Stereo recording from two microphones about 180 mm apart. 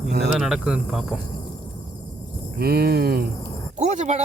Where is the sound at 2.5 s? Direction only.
60° right (ahead or behind).